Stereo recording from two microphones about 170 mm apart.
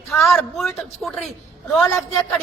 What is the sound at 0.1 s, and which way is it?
A woman's voice, centre (ahead or behind).